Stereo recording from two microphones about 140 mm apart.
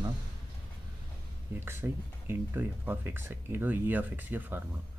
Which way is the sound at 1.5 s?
15° right (ahead or behind).